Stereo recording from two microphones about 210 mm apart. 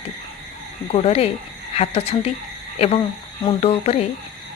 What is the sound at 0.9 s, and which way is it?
A woman's voice, 30° left (ahead or behind).